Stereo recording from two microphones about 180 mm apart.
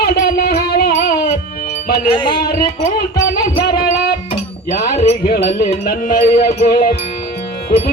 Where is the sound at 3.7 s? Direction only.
60° left (ahead or behind).